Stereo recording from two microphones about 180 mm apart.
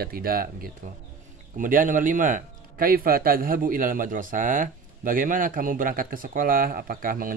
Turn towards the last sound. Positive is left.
turn(degrees=-50)  # may be behind; listen again after turning